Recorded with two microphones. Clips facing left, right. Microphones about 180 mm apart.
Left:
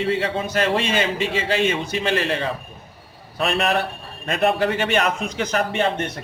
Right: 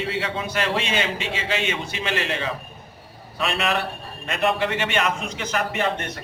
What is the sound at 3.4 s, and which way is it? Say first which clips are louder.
A man's voice: left 3 dB; 40° left (ahead or behind).